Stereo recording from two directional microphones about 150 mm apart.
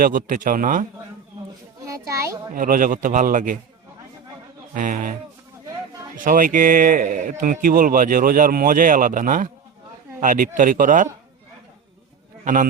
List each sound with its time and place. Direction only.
0.0 s a man's voice: 60° right (ahead or behind)
1.9 s a child's voice: 20° right (ahead or behind)
2.6 s a man's voice: 70° right (ahead or behind)
4.7 s a man's voice: 60° right (ahead or behind)
6.1 s a man's voice: 65° right (ahead or behind)